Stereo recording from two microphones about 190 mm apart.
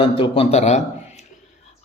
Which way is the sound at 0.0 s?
30° left (ahead or behind).